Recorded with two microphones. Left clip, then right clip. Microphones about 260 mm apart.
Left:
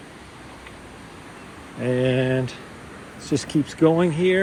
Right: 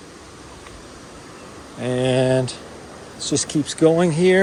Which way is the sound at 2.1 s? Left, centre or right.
Right.